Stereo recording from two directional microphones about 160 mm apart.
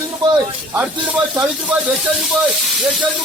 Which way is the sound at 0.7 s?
10° right (ahead or behind).